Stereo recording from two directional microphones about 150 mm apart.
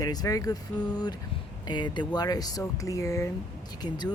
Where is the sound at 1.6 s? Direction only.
30° left (ahead or behind).